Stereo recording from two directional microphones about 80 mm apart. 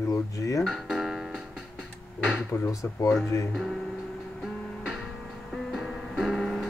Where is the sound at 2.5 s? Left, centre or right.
Left.